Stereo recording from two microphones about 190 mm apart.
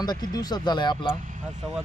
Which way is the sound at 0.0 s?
20° left (ahead or behind).